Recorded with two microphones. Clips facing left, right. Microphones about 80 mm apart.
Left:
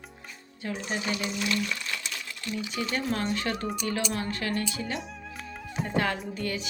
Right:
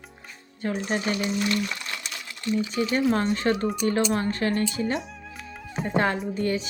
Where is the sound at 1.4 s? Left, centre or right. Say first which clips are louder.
Right 3 dB; right.